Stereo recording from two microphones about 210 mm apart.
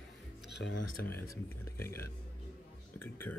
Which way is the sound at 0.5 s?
60° left (ahead or behind).